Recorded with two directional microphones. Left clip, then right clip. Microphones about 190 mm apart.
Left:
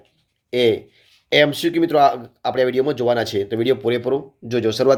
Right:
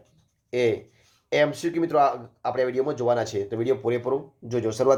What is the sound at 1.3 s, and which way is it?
Speech, 30° left (ahead or behind).